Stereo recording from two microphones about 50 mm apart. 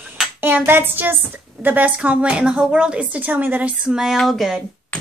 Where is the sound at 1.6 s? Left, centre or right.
Right.